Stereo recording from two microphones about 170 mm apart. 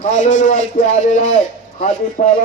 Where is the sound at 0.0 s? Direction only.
45° left (ahead or behind).